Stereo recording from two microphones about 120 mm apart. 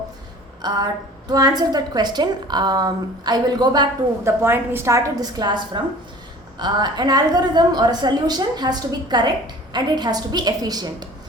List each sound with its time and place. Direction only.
0.6 s a woman's voice: 35° right (ahead or behind)
4.2 s a woman's voice: 20° right (ahead or behind)